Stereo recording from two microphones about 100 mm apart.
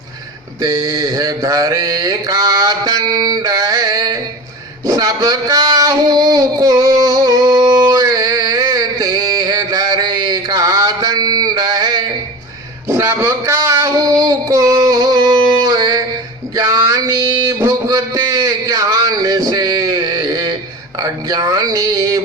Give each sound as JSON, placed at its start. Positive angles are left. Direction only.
{"t": 0.6, "sound": "mantra", "side_deg": -35}
{"t": 4.9, "sound": "child singing", "side_deg": -40}
{"t": 12.9, "sound": "a sound", "side_deg": -25}